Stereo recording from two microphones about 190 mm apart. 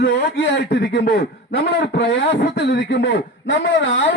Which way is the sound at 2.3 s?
65° left (ahead or behind).